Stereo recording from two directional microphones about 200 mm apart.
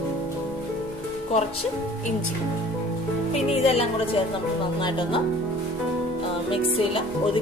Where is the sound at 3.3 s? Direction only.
30° left (ahead or behind).